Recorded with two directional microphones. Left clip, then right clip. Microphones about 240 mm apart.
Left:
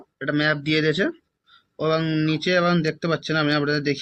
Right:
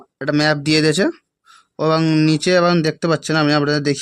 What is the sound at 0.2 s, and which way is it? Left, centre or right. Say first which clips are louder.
Speech: right 5 dB; right.